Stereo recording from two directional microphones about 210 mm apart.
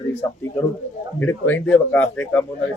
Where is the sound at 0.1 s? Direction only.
15° left (ahead or behind).